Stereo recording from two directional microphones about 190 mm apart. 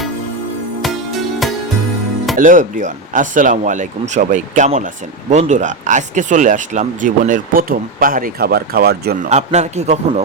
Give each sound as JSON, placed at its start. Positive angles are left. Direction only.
{"t": 0.8, "sound": "music", "side_deg": 0}
{"t": 2.3, "sound": "speech", "side_deg": -45}
{"t": 9.3, "sound": "a man's voice", "side_deg": -35}